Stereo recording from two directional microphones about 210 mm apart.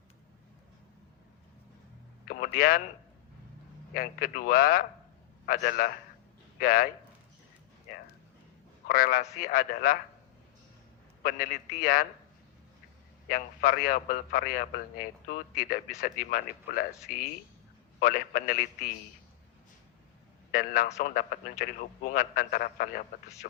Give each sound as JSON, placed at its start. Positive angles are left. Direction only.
{"t": 2.2, "sound": "speech", "side_deg": 45}
{"t": 3.9, "sound": "a man's voice", "side_deg": 40}
{"t": 8.9, "sound": "a man's voice", "side_deg": 45}
{"t": 11.2, "sound": "a man's voice", "side_deg": 45}
{"t": 13.2, "sound": "a man's voice", "side_deg": 40}
{"t": 20.5, "sound": "a man's voice", "side_deg": 40}